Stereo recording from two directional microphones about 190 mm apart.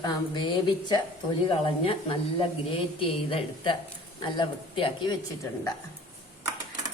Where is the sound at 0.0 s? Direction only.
25° left (ahead or behind).